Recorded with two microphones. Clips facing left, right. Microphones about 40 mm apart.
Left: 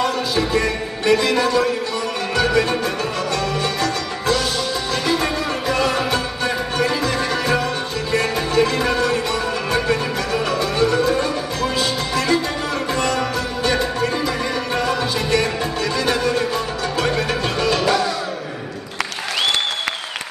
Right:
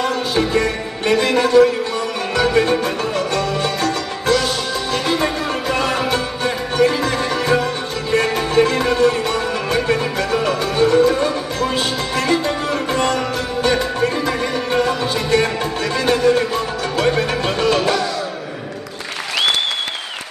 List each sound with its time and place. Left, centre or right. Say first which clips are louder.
0.0 s music: right 1 dB; right
14.2 s music: right 2 dB; right